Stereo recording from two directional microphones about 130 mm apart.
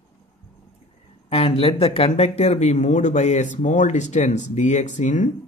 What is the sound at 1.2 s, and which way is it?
Speech, 50° left (ahead or behind).